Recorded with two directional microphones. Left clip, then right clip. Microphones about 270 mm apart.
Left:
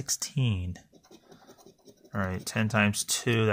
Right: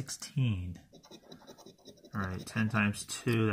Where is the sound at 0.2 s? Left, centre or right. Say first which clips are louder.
Left 5 dB; left.